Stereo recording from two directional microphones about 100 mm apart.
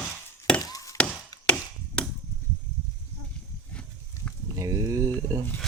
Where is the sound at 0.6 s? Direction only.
40° left (ahead or behind).